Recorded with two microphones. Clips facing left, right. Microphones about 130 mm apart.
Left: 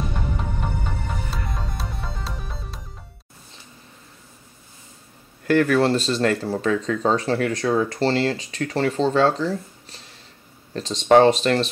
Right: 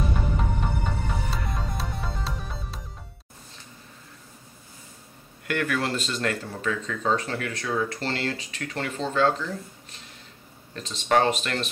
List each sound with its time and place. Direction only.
0.6 s music: centre (ahead or behind)
5.5 s speech: 35° left (ahead or behind)
10.7 s speech: 35° left (ahead or behind)